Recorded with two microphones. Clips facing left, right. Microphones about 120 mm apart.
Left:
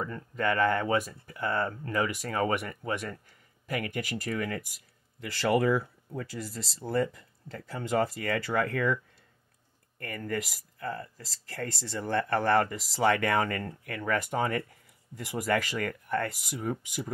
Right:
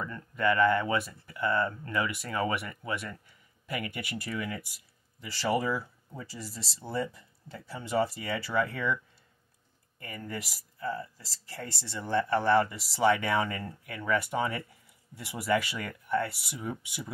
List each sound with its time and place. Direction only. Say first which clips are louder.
0.4 s speech: right 1 dB; 45° left (ahead or behind)